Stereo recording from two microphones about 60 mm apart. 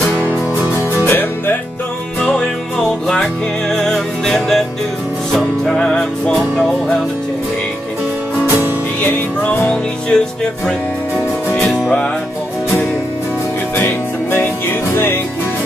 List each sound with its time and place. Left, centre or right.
2.2 s music: centre
9.0 s music: left
9.7 s music: centre
13.7 s music: left